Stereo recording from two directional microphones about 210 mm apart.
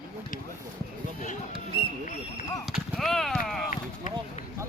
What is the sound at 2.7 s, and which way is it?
Clip-clop, centre (ahead or behind).